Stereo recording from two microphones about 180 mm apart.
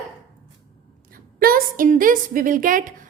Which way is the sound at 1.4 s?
55° right (ahead or behind).